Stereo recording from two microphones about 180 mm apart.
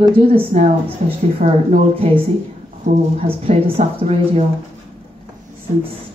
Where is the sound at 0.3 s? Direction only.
30° right (ahead or behind).